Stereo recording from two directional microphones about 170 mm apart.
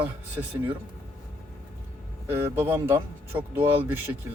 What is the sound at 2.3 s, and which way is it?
Speech, 15° right (ahead or behind).